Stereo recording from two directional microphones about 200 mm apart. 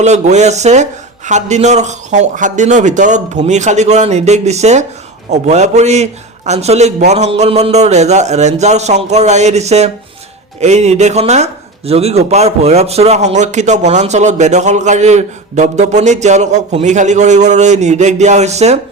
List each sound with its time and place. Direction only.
0.0 s speech: 35° right (ahead or behind)